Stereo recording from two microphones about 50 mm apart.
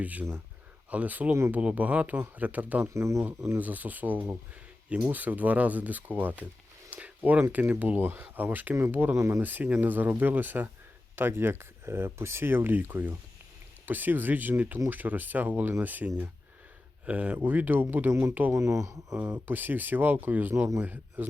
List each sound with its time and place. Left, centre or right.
0.0 s speech: right
2.8 s speech: right
3.6 s speech: right
6.9 s a sound: right
7.5 s speech: right
9.1 s speech: right
9.4 s speech: right
11.2 s speech: right
17.1 s speech: right
18.5 s speech: right
19.1 s speech: right
19.5 s a man's voice: right